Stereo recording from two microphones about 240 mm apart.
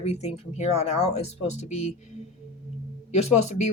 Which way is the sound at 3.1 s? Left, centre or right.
Left.